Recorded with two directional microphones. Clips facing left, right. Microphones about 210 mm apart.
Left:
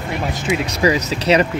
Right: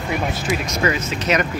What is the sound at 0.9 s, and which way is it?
Speech, 35° left (ahead or behind).